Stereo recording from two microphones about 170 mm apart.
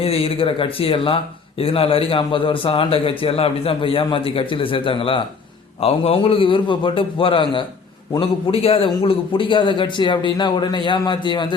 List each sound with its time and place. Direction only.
0.0 s speech: 35° left (ahead or behind)